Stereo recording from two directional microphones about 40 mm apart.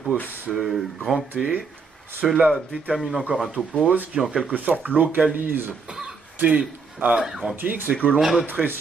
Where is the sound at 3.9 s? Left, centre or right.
Right.